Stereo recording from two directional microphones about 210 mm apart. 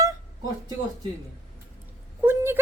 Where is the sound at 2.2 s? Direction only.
10° right (ahead or behind).